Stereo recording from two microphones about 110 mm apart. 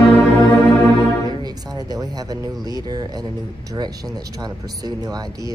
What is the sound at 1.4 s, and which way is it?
Speech, 35° right (ahead or behind).